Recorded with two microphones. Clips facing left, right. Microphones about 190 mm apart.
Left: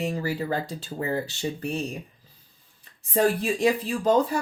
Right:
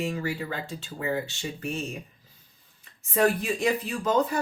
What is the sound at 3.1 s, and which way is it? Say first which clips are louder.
Speech: left 1 dB; 30° left (ahead or behind).